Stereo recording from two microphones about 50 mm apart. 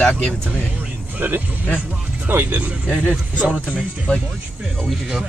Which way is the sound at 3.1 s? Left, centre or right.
Right.